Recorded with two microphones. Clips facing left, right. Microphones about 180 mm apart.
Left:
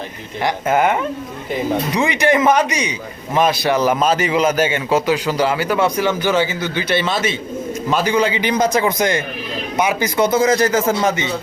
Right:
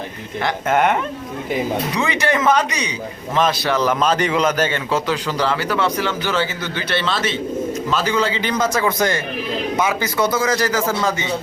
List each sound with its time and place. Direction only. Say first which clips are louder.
0.7 s speech: left 1 dB; centre (ahead or behind)
2.0 s a man's voice: left 5 dB; 15° left (ahead or behind)